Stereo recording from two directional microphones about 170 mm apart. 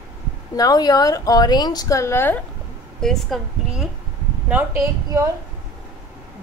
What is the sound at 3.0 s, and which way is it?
Speech, centre (ahead or behind).